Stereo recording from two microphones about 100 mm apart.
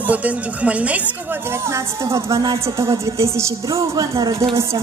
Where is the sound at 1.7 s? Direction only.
35° right (ahead or behind).